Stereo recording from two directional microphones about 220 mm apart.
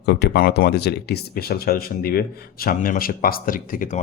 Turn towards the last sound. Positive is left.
turn(degrees=35)  # may be behind; listen again after turning